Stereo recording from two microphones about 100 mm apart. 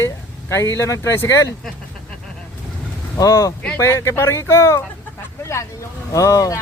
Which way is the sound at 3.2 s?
35° left (ahead or behind).